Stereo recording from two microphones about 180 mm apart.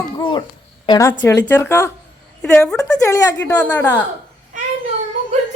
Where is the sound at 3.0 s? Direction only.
15° left (ahead or behind).